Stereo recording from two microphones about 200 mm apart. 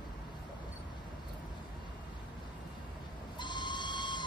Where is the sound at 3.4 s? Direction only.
20° left (ahead or behind).